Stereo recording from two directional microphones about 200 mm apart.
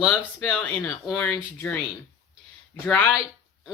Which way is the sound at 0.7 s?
10° left (ahead or behind).